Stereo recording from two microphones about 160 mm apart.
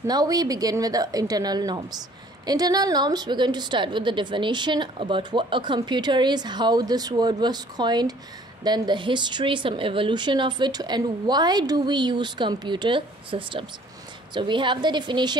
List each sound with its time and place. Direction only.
0.0 s a woman's voice: 25° right (ahead or behind)